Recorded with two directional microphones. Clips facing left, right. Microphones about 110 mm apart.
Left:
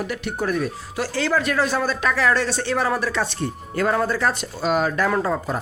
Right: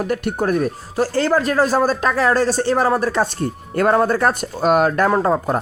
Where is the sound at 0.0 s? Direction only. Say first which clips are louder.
Right 5 dB; 45° right (ahead or behind).